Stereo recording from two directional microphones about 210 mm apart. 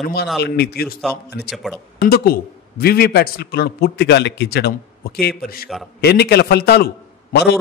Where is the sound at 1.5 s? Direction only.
Centre (ahead or behind).